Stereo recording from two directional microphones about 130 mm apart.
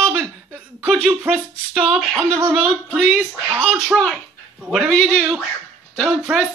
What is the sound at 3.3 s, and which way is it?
Speech, 10° right (ahead or behind).